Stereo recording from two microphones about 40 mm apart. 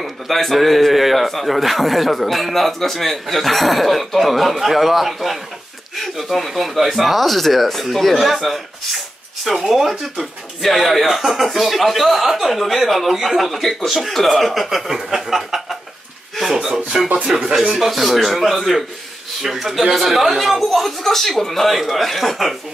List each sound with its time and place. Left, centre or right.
0.0 s speech: centre
16.9 s speech: centre
17.7 s speech: centre